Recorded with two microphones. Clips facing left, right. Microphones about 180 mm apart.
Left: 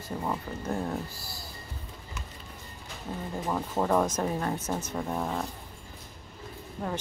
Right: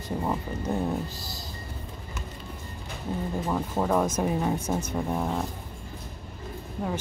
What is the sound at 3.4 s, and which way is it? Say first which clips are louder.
Speech: even; centre (ahead or behind).